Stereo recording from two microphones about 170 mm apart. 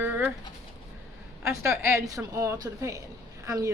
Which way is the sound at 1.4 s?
15° right (ahead or behind).